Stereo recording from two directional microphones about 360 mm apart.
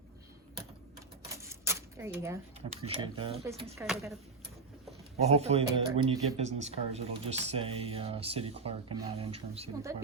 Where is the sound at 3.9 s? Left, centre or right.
Centre.